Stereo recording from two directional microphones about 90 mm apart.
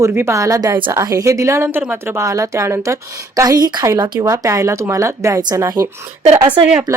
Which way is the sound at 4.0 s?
60° right (ahead or behind).